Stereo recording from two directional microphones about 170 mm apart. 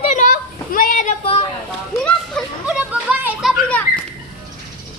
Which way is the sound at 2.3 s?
5° right (ahead or behind).